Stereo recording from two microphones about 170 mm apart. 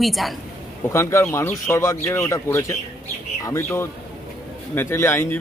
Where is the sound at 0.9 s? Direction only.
15° left (ahead or behind).